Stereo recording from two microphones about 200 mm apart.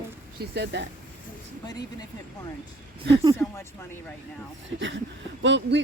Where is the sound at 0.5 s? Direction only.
60° right (ahead or behind).